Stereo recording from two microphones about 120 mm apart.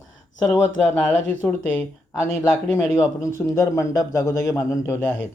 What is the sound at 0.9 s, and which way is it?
Speech, 15° left (ahead or behind).